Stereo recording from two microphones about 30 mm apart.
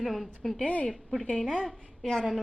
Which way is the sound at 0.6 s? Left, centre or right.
Left.